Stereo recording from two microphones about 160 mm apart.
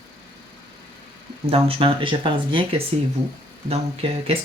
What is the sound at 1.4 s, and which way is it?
Speech, 35° right (ahead or behind).